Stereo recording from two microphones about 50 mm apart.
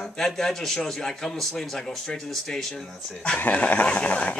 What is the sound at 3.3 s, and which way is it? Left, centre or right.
Speech, left.